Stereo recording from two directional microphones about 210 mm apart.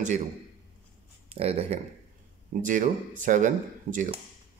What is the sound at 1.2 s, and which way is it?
Speech, 30° right (ahead or behind).